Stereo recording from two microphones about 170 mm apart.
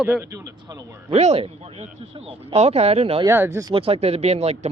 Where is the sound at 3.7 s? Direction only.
35° right (ahead or behind).